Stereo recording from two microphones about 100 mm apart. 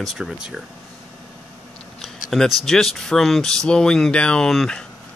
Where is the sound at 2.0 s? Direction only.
Centre (ahead or behind).